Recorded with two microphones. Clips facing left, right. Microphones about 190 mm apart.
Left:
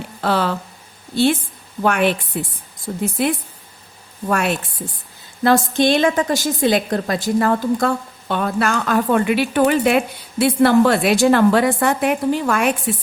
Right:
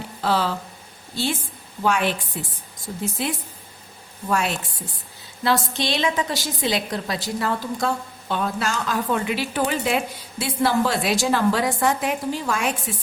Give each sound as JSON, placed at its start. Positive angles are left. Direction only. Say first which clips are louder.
{"t": 0.2, "sound": "a woman's voice", "louder": "left 3 dB", "side_deg": 60}